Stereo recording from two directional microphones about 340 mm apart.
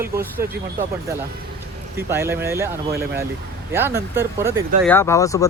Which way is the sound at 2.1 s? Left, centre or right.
Centre.